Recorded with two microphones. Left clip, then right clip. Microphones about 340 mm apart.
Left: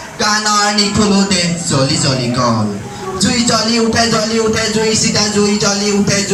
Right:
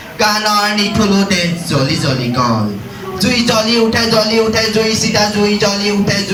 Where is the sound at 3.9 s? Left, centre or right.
Centre.